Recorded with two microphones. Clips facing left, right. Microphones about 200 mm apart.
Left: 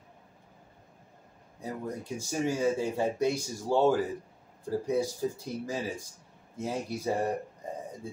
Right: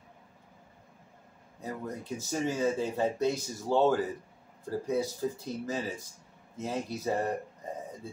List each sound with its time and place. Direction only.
1.6 s speech: 10° left (ahead or behind)